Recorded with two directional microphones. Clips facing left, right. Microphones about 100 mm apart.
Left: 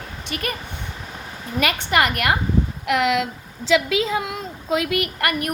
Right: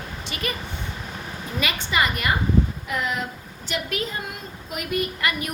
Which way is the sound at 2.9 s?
90° left.